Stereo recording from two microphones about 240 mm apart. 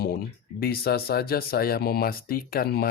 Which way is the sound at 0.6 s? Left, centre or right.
Left.